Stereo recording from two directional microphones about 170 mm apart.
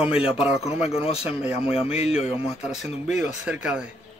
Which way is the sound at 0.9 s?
35° left (ahead or behind).